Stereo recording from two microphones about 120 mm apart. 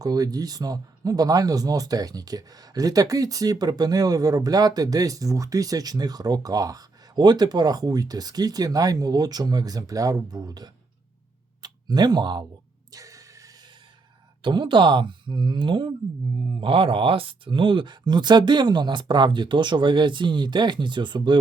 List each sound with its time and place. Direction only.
0.0 s speech: 30° right (ahead or behind)
12.9 s a sound: 30° right (ahead or behind)
14.4 s speech: 40° right (ahead or behind)